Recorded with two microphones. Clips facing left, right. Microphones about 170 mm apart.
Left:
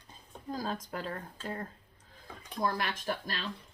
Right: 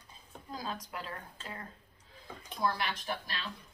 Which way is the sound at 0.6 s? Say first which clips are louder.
Left 3 dB; 45° left (ahead or behind).